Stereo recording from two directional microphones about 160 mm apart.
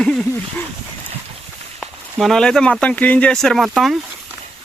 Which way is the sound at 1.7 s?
Centre (ahead or behind).